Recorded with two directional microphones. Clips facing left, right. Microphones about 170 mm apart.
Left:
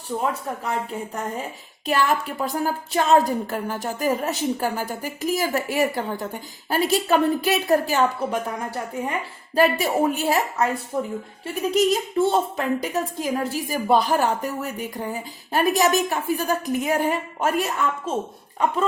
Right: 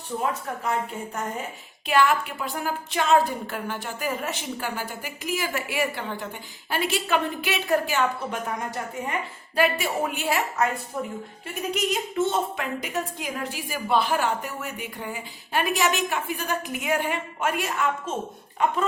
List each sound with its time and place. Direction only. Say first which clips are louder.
0.6 s a woman's voice: right 1 dB; 35° left (ahead or behind)